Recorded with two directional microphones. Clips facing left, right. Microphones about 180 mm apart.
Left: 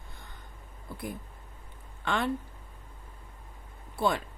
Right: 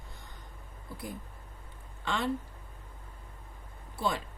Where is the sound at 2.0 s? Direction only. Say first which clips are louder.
Left 3 dB; 60° left (ahead or behind).